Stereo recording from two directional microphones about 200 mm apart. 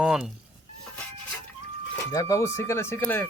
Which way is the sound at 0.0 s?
5° right (ahead or behind).